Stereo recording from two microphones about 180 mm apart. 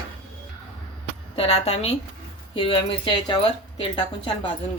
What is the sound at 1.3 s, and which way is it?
A woman's voice, 35° left (ahead or behind).